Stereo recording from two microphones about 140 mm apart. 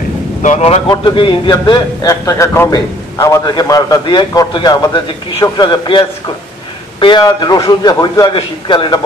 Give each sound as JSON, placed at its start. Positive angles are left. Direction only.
{"t": 0.4, "sound": "speech", "side_deg": 55}
{"t": 0.8, "sound": "a man's voice", "side_deg": 35}